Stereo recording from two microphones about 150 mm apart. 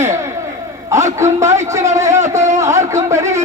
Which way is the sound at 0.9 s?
20° right (ahead or behind).